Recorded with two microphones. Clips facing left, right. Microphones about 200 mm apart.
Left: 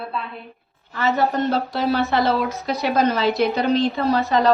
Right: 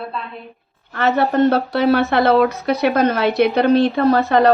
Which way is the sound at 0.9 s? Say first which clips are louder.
Right 3 dB; 60° right (ahead or behind).